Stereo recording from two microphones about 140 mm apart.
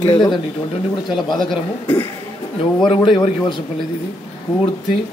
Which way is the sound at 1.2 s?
35° left (ahead or behind).